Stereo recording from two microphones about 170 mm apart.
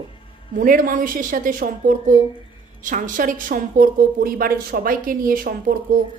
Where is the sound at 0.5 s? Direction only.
55° right (ahead or behind).